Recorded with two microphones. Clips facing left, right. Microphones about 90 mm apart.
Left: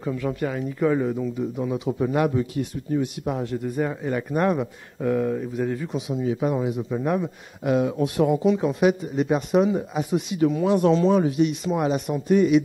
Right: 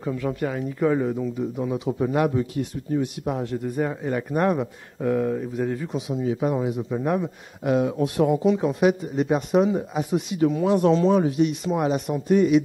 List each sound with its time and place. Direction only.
0.0 s speech: 35° right (ahead or behind)